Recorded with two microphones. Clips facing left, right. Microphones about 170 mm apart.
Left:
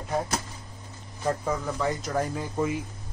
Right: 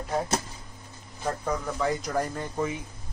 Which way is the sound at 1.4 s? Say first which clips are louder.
Even; centre (ahead or behind).